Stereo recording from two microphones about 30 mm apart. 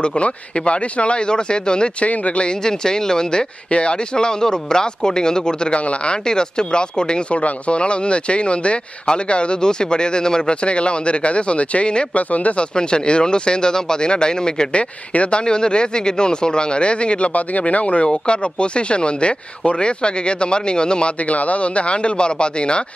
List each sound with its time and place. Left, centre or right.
0.0 s speech: left
2.0 s speech: left
2.6 s speech: left
10.5 s speech: left
12.2 s speech: left
12.7 s speech: left
14.8 s speech: left
15.4 s speech: left
17.3 s speech: left
18.0 s speech: left
21.3 s speech: left